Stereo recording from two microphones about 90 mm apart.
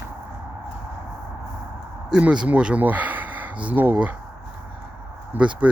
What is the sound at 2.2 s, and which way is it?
Speech, 15° right (ahead or behind).